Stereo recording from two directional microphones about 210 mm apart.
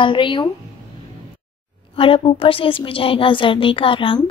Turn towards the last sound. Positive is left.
turn(degrees=25)  # may be behind; listen again after turning